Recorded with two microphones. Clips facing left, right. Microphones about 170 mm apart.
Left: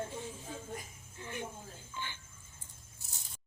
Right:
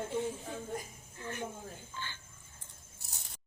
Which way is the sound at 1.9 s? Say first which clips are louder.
Left 4 dB; 15° left (ahead or behind).